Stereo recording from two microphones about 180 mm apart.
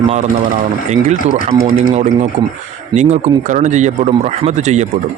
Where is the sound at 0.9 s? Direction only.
40° right (ahead or behind).